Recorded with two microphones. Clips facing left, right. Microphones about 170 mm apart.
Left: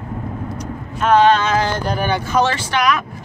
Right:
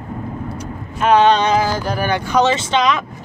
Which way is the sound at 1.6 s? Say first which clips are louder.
Even; 5° right (ahead or behind).